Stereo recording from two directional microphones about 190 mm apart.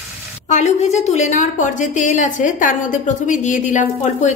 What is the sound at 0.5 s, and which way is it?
A woman's voice, 40° left (ahead or behind).